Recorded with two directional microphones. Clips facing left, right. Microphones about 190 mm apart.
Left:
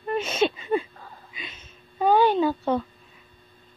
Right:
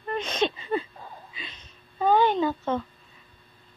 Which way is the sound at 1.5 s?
10° left (ahead or behind).